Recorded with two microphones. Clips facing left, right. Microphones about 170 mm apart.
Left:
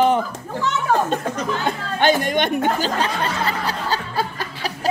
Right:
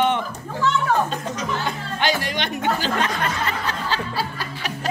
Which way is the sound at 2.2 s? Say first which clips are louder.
Left 5 dB; 50° left (ahead or behind).